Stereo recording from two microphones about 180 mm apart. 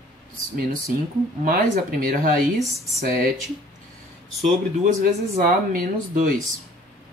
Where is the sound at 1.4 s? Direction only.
55° right (ahead or behind).